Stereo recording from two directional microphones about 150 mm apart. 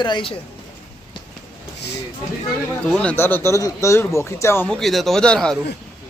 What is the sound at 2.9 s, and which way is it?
Speech, 10° left (ahead or behind).